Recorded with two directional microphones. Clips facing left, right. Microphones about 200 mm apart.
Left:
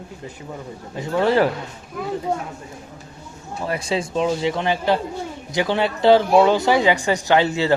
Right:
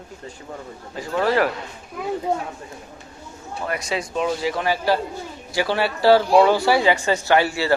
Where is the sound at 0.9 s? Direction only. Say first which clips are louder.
Left 2 dB; 20° left (ahead or behind).